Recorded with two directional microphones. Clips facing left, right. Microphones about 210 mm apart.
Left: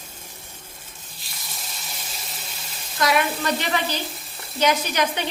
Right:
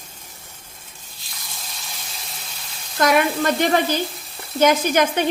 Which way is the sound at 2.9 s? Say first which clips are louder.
Right 4 dB; 50° right (ahead or behind).